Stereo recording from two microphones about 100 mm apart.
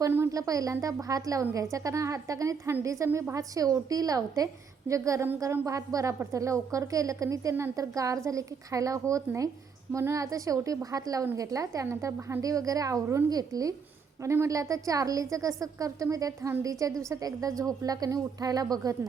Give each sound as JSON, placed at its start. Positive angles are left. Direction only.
{"t": 0.0, "sound": "a woman's voice", "side_deg": -30}